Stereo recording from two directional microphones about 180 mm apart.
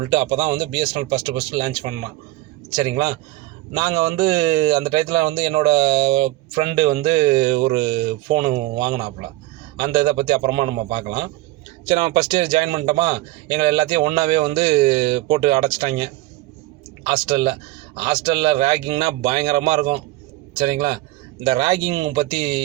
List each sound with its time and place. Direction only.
0.0 s speech: 25° right (ahead or behind)
17.1 s a man's voice: 25° right (ahead or behind)